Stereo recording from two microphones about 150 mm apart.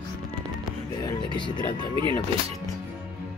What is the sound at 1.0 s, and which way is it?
Speech, 30° left (ahead or behind).